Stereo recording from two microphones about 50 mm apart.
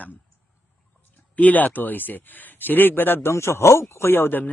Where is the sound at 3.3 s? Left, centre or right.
Left.